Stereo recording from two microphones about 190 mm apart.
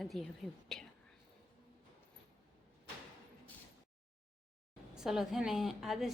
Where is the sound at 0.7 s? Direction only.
Centre (ahead or behind).